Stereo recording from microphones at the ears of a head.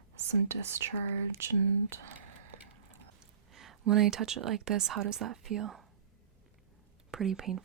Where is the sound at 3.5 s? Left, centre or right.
Right.